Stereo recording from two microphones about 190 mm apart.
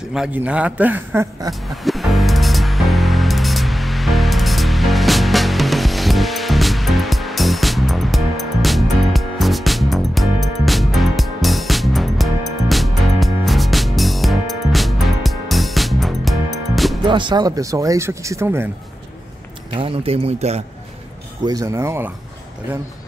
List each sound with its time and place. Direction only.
0.1 s speech: 5° right (ahead or behind)
1.5 s music: centre (ahead or behind)
17.0 s speech: 25° right (ahead or behind)
19.7 s speech: 30° right (ahead or behind)
21.5 s speech: 15° right (ahead or behind)